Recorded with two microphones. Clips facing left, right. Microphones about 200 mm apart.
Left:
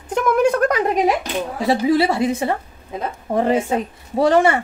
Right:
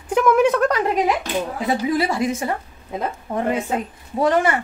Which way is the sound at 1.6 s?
30° left (ahead or behind).